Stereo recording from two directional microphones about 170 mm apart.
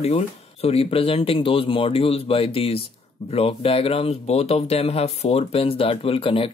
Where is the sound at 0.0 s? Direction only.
35° left (ahead or behind).